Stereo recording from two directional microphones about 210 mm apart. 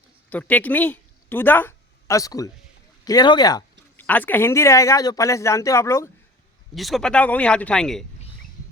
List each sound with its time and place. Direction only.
0.3 s speech: 5° left (ahead or behind)
3.0 s a sound: 20° left (ahead or behind)
4.0 s speech: 10° left (ahead or behind)
6.7 s speech: centre (ahead or behind)